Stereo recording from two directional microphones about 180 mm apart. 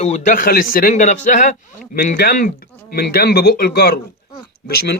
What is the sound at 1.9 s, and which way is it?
A man's voice, 55° left (ahead or behind).